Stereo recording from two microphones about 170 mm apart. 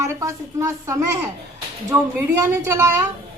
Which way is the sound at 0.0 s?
20° right (ahead or behind).